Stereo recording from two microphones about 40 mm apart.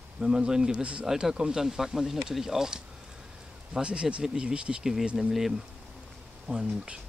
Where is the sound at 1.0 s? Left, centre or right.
Centre.